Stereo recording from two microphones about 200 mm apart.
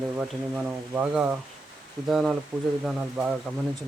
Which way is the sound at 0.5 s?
10° right (ahead or behind).